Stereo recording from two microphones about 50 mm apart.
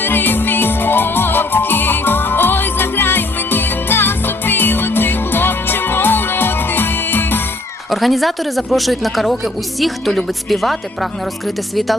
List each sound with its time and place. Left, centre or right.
0.0 s music: left
7.9 s a man's voice: centre